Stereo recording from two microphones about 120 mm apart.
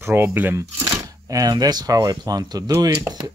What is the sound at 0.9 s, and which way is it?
Speech, 30° right (ahead or behind).